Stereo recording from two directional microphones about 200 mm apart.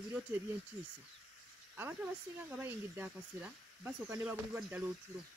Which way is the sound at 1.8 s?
10° right (ahead or behind).